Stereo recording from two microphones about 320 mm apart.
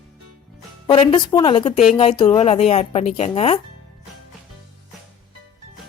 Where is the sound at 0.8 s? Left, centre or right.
Centre.